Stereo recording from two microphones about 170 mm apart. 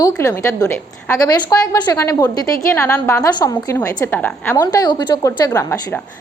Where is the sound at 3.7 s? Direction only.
10° left (ahead or behind).